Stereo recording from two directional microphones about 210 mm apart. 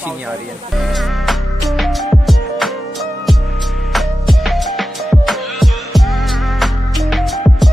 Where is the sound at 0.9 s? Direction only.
Centre (ahead or behind).